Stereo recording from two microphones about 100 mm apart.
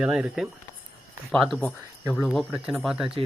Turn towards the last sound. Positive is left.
turn(degrees=-5)  # may be behind; listen again after turning